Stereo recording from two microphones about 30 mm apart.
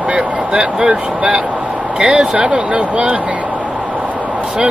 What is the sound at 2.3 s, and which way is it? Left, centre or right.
Speech, right.